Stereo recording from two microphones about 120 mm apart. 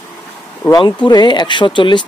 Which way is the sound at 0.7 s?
35° left (ahead or behind).